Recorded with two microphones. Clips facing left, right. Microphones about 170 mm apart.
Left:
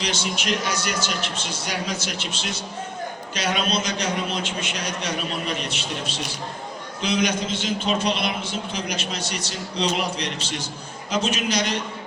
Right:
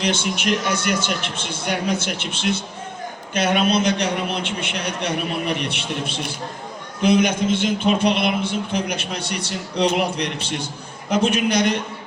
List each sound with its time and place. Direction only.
0.0 s a man's voice: 55° right (ahead or behind)